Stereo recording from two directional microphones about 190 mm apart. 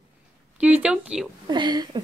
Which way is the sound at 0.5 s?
5° right (ahead or behind).